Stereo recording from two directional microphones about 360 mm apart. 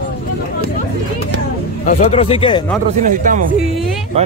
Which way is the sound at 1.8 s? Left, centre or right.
Centre.